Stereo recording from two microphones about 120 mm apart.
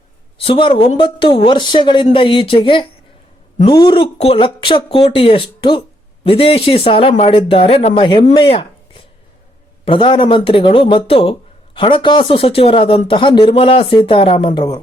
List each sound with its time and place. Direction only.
0.3 s speech: 50° left (ahead or behind)
7.9 s speech: 40° left (ahead or behind)
9.8 s speech: 50° left (ahead or behind)